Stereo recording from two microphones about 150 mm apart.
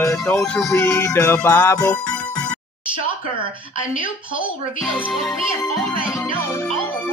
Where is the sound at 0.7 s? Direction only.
20° left (ahead or behind).